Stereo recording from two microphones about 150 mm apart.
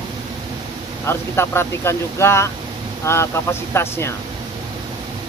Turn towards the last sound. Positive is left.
turn(degrees=15)  # may be behind; listen again after turning